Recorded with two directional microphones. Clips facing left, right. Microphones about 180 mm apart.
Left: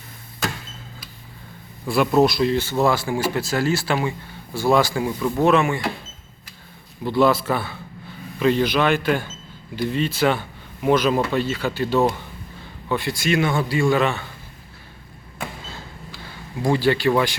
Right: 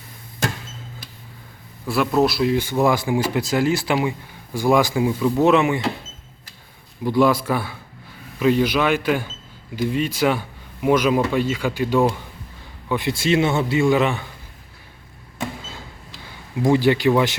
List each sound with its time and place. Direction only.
1.9 s speech: centre (ahead or behind); by 5.8 s 20° right (ahead or behind)
7.0 s a man's voice: 10° right (ahead or behind)
16.6 s speech: 20° right (ahead or behind)